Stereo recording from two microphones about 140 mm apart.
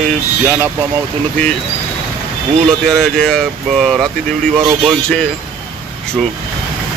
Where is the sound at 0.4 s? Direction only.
25° right (ahead or behind).